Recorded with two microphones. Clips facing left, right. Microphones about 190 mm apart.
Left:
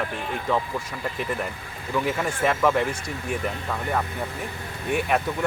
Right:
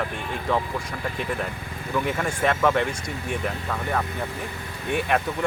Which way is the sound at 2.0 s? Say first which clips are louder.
Even; 5° left (ahead or behind).